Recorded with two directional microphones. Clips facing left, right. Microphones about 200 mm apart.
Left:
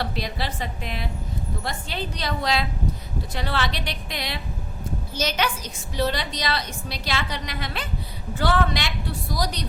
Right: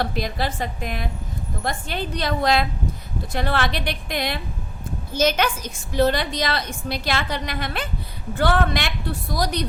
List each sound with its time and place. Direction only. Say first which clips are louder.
0.0 s a woman's voice: right 4 dB; 45° right (ahead or behind)